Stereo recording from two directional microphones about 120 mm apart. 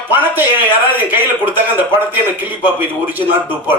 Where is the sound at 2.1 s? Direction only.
15° right (ahead or behind).